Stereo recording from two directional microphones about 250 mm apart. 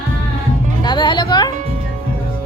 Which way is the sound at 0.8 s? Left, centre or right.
Centre.